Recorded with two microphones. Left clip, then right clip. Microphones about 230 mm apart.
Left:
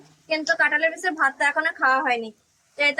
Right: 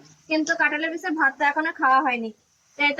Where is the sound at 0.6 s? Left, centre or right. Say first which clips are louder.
Left 3 dB; left.